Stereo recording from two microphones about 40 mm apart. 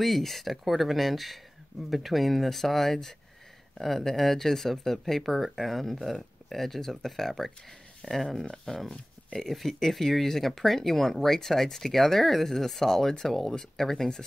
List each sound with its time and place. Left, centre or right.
0.0 s speech: centre